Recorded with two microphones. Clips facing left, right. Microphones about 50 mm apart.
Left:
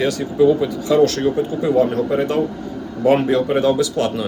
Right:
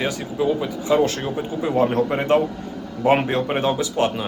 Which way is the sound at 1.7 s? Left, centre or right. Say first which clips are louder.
Left 2 dB; right.